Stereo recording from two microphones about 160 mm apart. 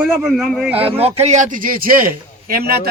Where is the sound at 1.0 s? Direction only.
40° right (ahead or behind); by 2.1 s 65° right (ahead or behind).